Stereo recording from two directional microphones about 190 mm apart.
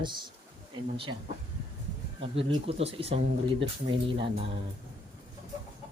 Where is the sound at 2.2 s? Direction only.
30° right (ahead or behind).